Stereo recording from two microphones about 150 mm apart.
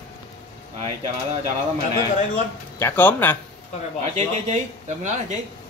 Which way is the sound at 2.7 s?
15° left (ahead or behind).